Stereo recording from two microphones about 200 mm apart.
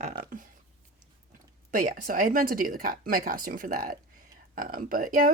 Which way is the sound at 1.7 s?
40° right (ahead or behind).